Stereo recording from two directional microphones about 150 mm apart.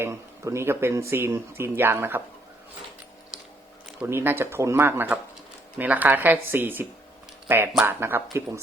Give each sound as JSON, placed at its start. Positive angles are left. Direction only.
{"t": 0.0, "sound": "speech", "side_deg": -20}
{"t": 4.0, "sound": "speech", "side_deg": -15}